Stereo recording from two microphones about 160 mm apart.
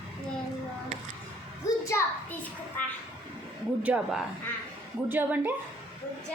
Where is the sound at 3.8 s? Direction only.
5° right (ahead or behind).